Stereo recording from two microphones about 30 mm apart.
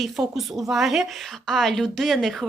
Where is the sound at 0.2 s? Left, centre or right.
Centre.